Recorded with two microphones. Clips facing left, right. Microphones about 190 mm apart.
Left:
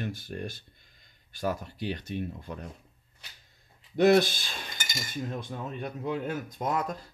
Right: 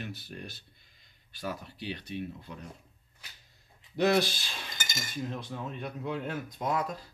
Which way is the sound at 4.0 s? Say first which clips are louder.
Left 5 dB; 50° left (ahead or behind).